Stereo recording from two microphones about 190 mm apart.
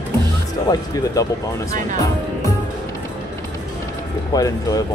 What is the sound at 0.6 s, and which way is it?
Speech, 20° left (ahead or behind).